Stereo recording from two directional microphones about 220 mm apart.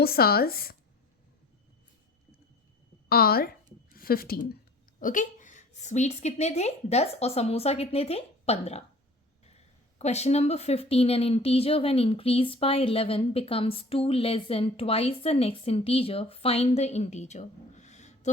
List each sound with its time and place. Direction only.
0.0 s speech: 45° left (ahead or behind)
3.1 s a woman's voice: 45° left (ahead or behind); by 8.8 s 30° left (ahead or behind)
10.0 s speech: 30° left (ahead or behind)